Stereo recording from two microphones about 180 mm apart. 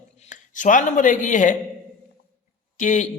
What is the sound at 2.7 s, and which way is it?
Speech, 45° left (ahead or behind).